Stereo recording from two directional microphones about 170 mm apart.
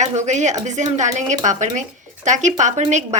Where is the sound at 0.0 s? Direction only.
45° right (ahead or behind).